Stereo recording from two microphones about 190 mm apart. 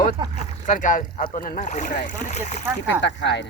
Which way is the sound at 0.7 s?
45° left (ahead or behind).